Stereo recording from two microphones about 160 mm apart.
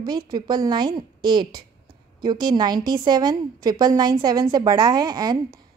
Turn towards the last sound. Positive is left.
turn(degrees=-25)  # may be behind; listen again after turning